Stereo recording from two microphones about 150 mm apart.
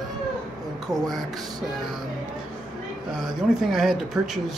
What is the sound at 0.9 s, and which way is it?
Speech, centre (ahead or behind).